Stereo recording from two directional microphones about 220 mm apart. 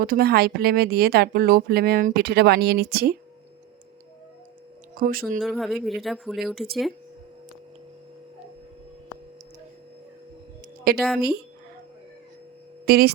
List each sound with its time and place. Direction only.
0.0 s speech: 40° right (ahead or behind)
4.9 s speech: 40° right (ahead or behind)
5.4 s speech: centre (ahead or behind)
10.9 s a woman's voice: 40° right (ahead or behind)
12.8 s speech: 45° right (ahead or behind)